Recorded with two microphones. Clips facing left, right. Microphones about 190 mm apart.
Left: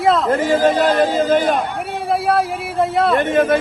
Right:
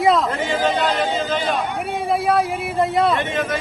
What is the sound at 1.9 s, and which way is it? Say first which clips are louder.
Speech: left 1 dB; centre (ahead or behind).